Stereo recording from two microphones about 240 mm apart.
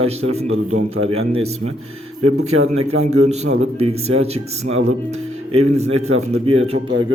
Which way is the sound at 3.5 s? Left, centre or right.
Right.